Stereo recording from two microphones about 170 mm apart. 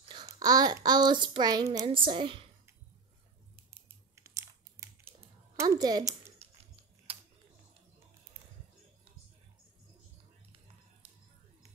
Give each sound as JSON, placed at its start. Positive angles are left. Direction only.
{"t": 0.0, "sound": "a child's voice", "side_deg": -25}
{"t": 4.1, "sound": "computer keyboard", "side_deg": -15}
{"t": 5.6, "sound": "a woman's voice", "side_deg": -20}